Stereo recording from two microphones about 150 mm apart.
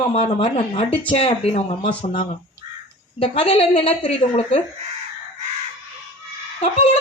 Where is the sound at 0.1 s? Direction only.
40° left (ahead or behind).